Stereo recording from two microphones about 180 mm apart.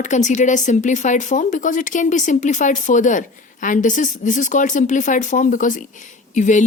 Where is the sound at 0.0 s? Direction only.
40° left (ahead or behind).